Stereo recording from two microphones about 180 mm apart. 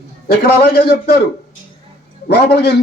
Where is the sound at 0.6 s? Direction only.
60° left (ahead or behind).